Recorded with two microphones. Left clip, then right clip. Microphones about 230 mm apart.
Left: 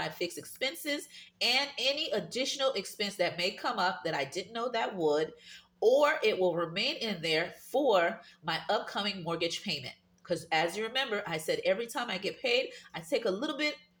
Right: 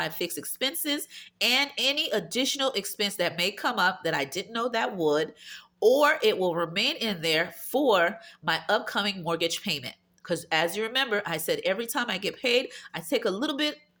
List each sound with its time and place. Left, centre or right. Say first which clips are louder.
0.0 s speech: right 4 dB; right